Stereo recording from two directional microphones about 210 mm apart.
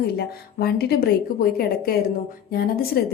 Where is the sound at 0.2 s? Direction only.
50° left (ahead or behind).